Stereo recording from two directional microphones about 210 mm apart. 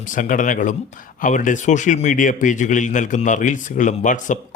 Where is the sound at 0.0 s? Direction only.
40° left (ahead or behind).